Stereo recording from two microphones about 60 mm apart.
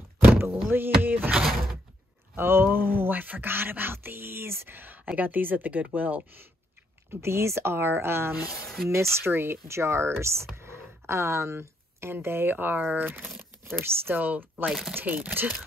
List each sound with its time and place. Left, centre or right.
0.2 s door: right
0.7 s speech: right
1.3 s door: centre
2.3 s speech: right
4.7 s speech: right
7.1 s speech: right
14.7 s speech: centre
15.0 s speech: right